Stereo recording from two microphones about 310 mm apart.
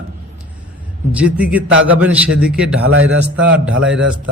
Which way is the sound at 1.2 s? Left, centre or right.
Centre.